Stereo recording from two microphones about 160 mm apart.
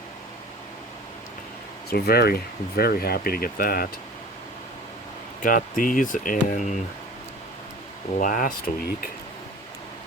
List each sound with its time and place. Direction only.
1.9 s speech: 75° left (ahead or behind)
5.4 s speech: 60° left (ahead or behind)
8.2 s speech: 55° left (ahead or behind)